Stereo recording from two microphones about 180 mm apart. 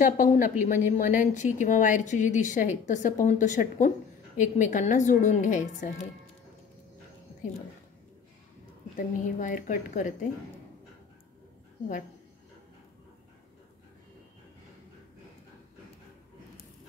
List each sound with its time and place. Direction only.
0.0 s a woman's voice: 50° left (ahead or behind)
8.9 s a woman's voice: 45° left (ahead or behind)